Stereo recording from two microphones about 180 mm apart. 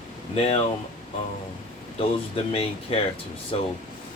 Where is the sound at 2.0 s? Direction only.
30° left (ahead or behind).